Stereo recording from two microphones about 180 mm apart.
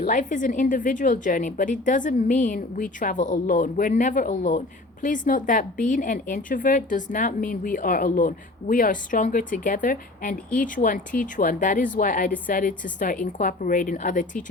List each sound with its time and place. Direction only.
0.0 s a woman's voice: 45° left (ahead or behind)